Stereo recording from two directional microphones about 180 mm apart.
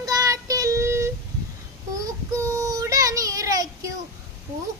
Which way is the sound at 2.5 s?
20° right (ahead or behind).